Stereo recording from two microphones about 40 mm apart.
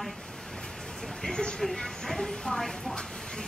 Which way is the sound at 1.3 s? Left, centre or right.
Centre.